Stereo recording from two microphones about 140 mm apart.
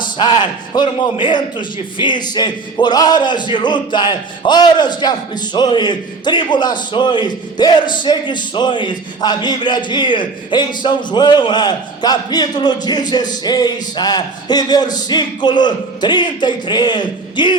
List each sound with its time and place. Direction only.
0.0 s a man's voice: 30° left (ahead or behind)